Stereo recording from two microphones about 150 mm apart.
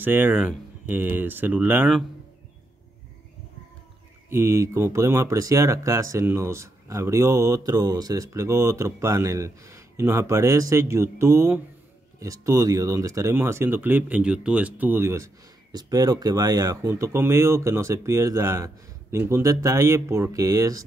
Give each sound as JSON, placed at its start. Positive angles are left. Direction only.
{"t": 0.0, "sound": "speech", "side_deg": -15}
{"t": 4.3, "sound": "speech", "side_deg": -15}